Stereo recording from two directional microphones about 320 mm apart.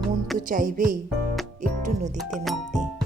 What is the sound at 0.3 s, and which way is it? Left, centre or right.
Music, right.